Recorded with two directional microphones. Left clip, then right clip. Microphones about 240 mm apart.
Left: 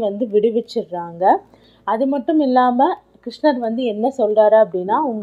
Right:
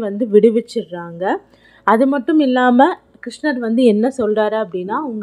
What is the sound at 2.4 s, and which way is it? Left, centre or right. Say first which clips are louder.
Speech: right 2 dB; right.